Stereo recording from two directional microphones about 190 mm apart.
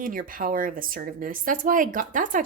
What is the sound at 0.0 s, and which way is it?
A woman's voice, 45° right (ahead or behind).